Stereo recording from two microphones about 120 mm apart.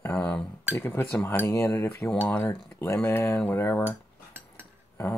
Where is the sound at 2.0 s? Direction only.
10° left (ahead or behind).